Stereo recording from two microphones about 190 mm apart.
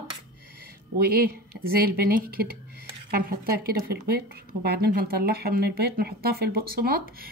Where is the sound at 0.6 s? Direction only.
55° right (ahead or behind).